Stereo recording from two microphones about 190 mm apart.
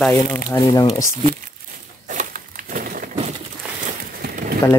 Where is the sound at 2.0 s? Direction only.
45° right (ahead or behind).